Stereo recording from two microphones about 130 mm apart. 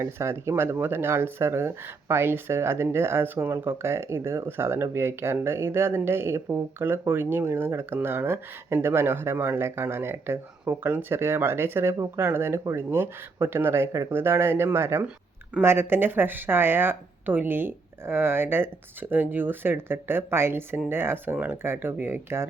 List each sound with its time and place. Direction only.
0.0 s speech: 20° right (ahead or behind)